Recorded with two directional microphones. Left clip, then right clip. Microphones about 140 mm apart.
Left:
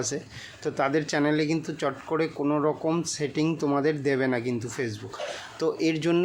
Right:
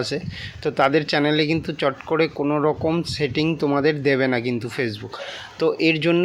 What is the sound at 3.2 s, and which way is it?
Speech, 25° right (ahead or behind).